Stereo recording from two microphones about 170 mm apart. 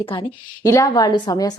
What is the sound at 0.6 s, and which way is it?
Speech, 20° left (ahead or behind).